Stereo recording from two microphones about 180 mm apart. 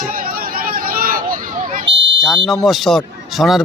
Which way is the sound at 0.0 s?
50° right (ahead or behind).